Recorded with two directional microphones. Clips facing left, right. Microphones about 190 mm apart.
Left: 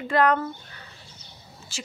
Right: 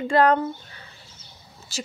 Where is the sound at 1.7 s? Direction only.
40° right (ahead or behind).